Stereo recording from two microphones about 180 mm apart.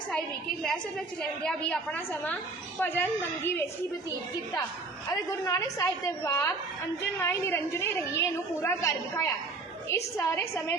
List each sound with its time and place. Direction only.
0.6 s a woman's voice: 5° left (ahead or behind)
5.0 s a woman's voice: 20° left (ahead or behind)